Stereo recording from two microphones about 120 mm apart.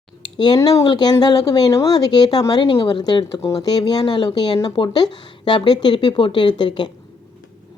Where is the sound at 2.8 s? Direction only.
35° left (ahead or behind).